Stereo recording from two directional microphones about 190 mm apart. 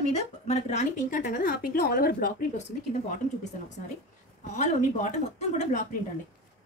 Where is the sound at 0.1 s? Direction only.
35° left (ahead or behind); by 2.3 s 50° left (ahead or behind).